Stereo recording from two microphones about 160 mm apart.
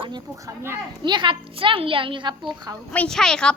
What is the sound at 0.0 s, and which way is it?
A child's voice, 25° right (ahead or behind).